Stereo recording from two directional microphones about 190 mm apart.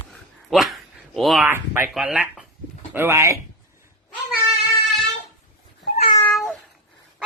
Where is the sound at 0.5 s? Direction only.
Centre (ahead or behind).